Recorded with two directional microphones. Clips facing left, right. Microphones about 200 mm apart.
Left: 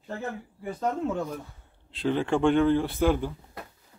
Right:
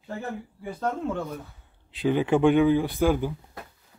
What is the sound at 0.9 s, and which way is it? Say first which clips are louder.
Speech: left 1 dB; 5° left (ahead or behind).